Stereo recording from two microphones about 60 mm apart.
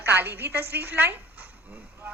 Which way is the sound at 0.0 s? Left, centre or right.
Right.